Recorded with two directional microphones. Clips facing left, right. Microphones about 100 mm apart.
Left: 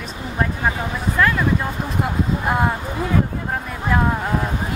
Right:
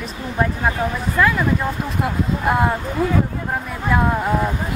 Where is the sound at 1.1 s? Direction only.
5° right (ahead or behind).